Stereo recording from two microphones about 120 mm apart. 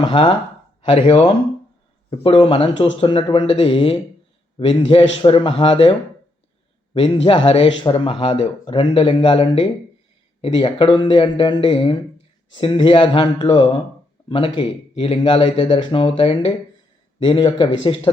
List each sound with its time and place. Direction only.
0.0 s a man's voice: 40° left (ahead or behind)